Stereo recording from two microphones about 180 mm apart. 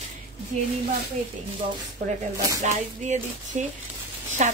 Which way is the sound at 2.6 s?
40° right (ahead or behind).